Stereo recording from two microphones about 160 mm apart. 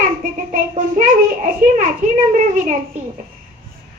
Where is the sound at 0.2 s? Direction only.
55° right (ahead or behind).